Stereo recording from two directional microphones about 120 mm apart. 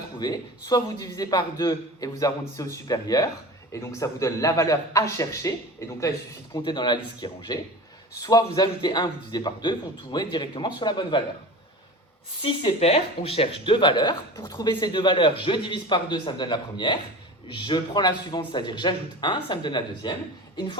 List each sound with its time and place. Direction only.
0.2 s a man's voice: 35° left (ahead or behind)
6.7 s a man's voice: 40° left (ahead or behind)
12.4 s a man's voice: 55° left (ahead or behind); by 20.1 s 40° left (ahead or behind)